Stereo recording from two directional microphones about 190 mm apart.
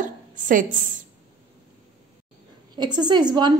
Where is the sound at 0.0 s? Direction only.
45° right (ahead or behind).